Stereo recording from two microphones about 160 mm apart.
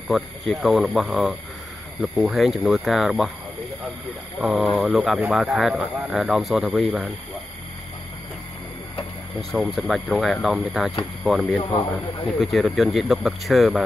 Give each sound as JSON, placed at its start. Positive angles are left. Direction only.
{"t": 0.1, "sound": "speech", "side_deg": 0}
{"t": 4.4, "sound": "speech", "side_deg": -5}
{"t": 9.8, "sound": "speech", "side_deg": 0}
{"t": 11.6, "sound": "a man's voice", "side_deg": 35}
{"t": 12.3, "sound": "speech", "side_deg": 0}